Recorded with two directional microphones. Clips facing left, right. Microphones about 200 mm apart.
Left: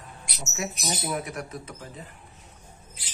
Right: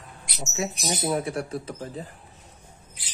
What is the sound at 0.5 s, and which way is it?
Speech, 25° right (ahead or behind).